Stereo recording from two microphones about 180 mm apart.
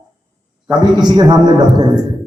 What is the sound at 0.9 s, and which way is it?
Speech, 25° right (ahead or behind).